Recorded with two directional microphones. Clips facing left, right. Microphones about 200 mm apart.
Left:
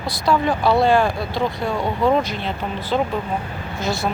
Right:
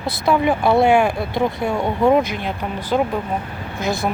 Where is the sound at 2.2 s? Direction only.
55° right (ahead or behind).